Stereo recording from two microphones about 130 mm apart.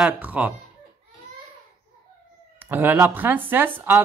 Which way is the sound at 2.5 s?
15° right (ahead or behind).